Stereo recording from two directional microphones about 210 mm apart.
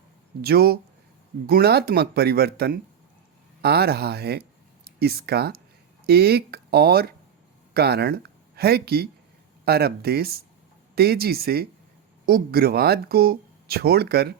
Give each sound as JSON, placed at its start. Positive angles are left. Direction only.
{"t": 0.4, "sound": "speech", "side_deg": -50}